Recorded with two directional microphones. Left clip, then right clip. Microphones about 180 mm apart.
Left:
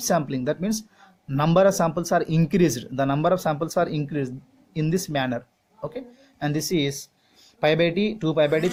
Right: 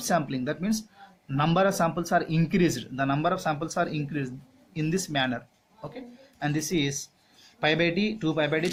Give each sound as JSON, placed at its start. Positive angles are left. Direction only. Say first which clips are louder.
{"t": 0.0, "sound": "speech", "louder": "left 4 dB", "side_deg": 45}
{"t": 6.4, "sound": "speech", "louder": "left 3 dB", "side_deg": 45}